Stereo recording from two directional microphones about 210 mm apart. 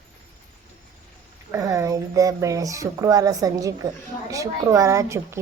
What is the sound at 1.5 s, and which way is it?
Speech, 15° right (ahead or behind).